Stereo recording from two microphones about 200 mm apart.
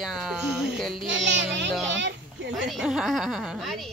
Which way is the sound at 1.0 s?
65° right (ahead or behind).